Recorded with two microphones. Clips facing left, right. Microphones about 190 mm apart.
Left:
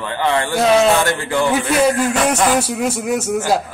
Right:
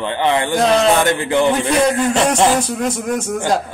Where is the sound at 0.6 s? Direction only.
5° left (ahead or behind).